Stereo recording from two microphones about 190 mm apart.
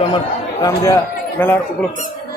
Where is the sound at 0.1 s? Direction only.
20° left (ahead or behind).